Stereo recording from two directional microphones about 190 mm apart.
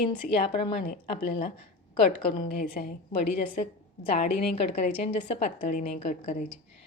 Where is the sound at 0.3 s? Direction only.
30° left (ahead or behind).